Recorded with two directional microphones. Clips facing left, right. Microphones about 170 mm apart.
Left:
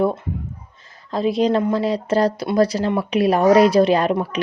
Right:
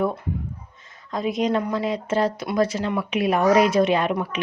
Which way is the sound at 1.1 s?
30° left (ahead or behind).